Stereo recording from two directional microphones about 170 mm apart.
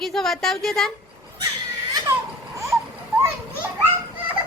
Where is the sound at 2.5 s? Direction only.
20° right (ahead or behind).